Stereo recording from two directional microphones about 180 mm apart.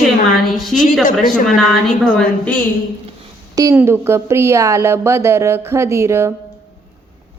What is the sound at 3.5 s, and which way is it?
A woman's voice, 20° right (ahead or behind).